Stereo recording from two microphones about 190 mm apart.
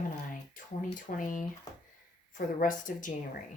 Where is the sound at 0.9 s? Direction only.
45° left (ahead or behind).